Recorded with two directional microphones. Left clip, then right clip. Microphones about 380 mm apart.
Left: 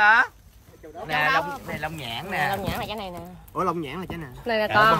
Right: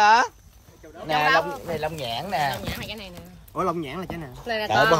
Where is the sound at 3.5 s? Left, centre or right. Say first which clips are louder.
Even; centre.